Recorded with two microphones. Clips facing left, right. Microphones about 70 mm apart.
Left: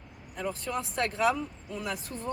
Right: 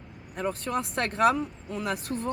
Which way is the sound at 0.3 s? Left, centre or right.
Right.